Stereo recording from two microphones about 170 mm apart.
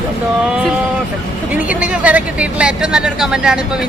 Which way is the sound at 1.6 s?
10° right (ahead or behind).